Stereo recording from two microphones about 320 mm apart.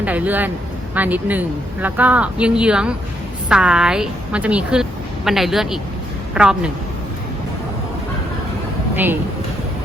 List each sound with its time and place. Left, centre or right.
0.0 s a woman's voice: centre